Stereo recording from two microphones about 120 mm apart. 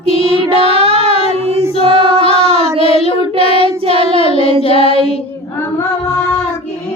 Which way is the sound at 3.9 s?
50° right (ahead or behind).